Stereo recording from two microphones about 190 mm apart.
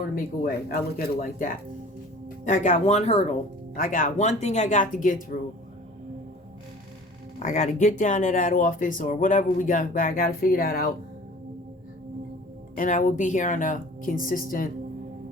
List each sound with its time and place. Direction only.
0.4 s speech: 50° left (ahead or behind)
7.3 s speech: 35° left (ahead or behind)
12.7 s speech: 45° left (ahead or behind)